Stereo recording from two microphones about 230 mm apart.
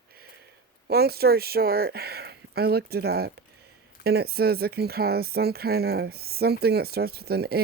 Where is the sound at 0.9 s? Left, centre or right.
Right.